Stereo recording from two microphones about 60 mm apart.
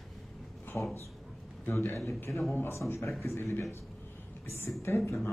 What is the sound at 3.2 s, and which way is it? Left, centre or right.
Speech, left.